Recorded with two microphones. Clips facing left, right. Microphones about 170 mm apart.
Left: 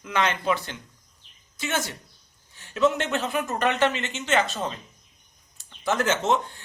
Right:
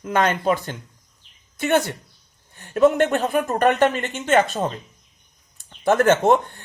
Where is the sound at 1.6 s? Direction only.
55° right (ahead or behind).